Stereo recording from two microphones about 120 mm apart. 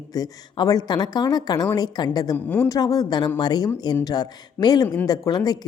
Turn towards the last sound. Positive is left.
turn(degrees=35)  # may be behind; listen again after turning